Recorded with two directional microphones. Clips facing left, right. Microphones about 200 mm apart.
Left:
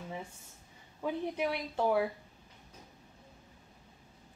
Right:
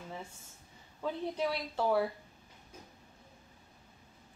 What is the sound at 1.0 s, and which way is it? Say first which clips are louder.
A woman's voice: left 1 dB; 15° left (ahead or behind).